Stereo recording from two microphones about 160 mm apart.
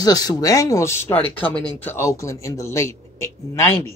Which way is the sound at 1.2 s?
35° left (ahead or behind).